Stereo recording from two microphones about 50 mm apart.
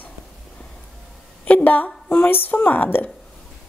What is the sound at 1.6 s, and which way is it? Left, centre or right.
A woman's voice, left.